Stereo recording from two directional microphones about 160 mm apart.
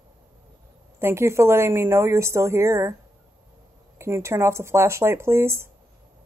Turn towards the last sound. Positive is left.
turn(degrees=-15)  # may be behind; listen again after turning